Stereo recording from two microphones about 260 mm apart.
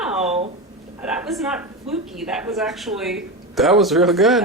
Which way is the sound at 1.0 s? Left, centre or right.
Centre.